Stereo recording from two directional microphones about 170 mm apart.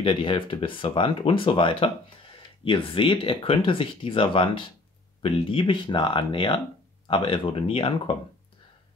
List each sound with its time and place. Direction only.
0.0 s speech: 30° left (ahead or behind)